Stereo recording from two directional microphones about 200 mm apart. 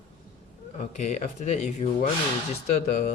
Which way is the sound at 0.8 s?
35° left (ahead or behind).